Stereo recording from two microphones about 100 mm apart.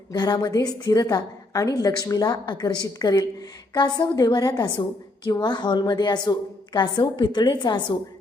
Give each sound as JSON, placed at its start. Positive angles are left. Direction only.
{"t": 0.1, "sound": "a woman's voice", "side_deg": 40}